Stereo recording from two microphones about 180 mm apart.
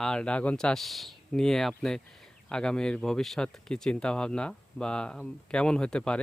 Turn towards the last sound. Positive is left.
turn(degrees=5)  # may be behind; listen again after turning